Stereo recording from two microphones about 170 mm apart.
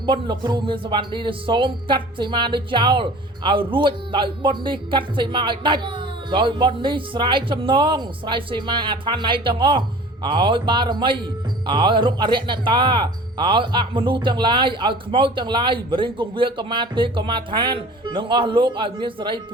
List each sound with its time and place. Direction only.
0.0 s speech: 25° right (ahead or behind)